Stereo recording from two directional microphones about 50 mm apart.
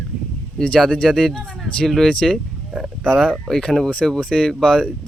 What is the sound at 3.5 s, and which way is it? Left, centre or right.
Speech, centre.